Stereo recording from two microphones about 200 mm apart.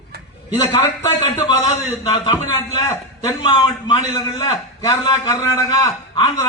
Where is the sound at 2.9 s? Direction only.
20° left (ahead or behind).